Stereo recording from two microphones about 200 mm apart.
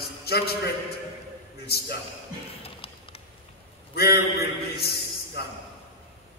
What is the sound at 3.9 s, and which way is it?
A man's voice, 50° left (ahead or behind).